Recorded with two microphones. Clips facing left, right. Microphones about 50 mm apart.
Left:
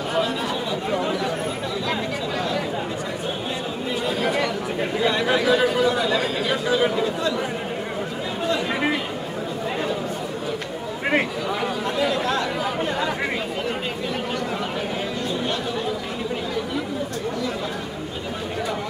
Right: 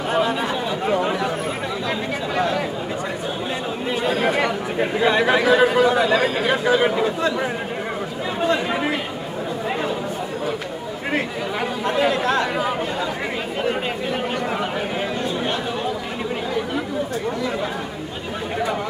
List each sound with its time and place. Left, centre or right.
0.1 s chatter: right
4.2 s chatter: right
11.9 s chatter: right